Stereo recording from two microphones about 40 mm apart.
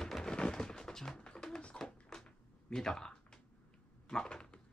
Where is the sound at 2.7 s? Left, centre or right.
Centre.